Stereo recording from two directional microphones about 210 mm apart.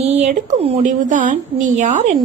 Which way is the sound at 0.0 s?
35° right (ahead or behind).